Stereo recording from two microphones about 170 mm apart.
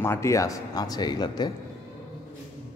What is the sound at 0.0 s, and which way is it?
Speech, 15° left (ahead or behind).